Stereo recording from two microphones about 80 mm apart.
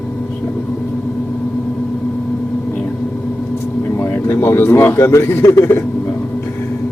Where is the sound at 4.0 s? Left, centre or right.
Left.